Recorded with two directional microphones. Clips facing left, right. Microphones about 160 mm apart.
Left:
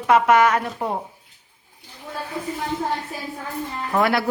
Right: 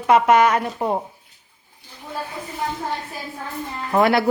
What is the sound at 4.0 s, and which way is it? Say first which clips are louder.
Speech: right 3 dB; 25° right (ahead or behind).